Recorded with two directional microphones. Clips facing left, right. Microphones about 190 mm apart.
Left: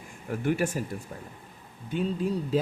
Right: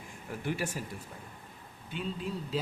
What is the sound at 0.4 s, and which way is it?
Speech, 55° left (ahead or behind).